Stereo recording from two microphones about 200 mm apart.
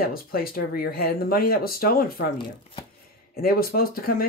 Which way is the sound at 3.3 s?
50° left (ahead or behind).